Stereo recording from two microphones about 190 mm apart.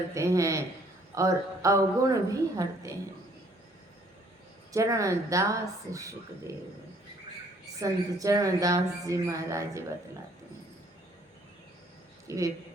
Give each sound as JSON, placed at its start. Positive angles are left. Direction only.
{"t": 0.1, "sound": "speech", "side_deg": -15}
{"t": 4.7, "sound": "speech", "side_deg": -15}
{"t": 7.8, "sound": "speech", "side_deg": -15}
{"t": 12.3, "sound": "speech", "side_deg": -15}